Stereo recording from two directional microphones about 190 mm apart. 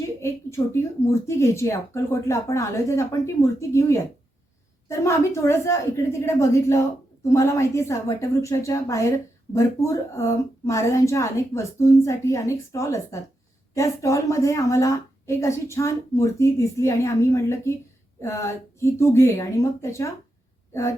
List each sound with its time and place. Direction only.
0.2 s a woman's voice: 15° left (ahead or behind)